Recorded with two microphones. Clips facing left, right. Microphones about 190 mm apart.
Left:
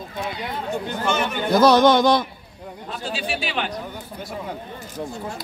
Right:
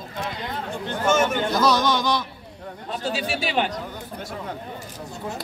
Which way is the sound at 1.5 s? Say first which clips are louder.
Left 12 dB; 55° left (ahead or behind).